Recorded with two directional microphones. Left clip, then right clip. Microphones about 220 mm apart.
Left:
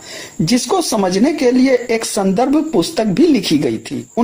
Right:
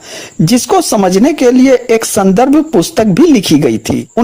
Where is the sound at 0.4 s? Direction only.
40° right (ahead or behind).